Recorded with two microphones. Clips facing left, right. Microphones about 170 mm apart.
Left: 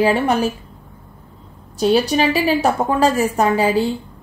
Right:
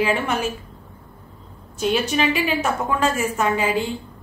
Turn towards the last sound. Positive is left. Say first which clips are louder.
# left 5 dB
turn(degrees=35)  # may be behind; listen again after turning